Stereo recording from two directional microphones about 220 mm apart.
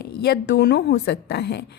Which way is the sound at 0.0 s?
50° left (ahead or behind).